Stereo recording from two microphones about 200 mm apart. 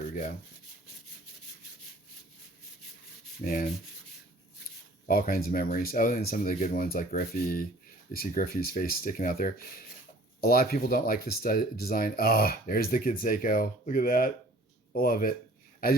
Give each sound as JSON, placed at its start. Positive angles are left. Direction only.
{"t": 3.4, "sound": "speech", "side_deg": 45}
{"t": 5.0, "sound": "speech", "side_deg": 45}